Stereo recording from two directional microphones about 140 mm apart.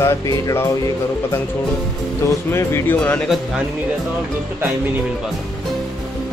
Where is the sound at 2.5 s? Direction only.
20° left (ahead or behind).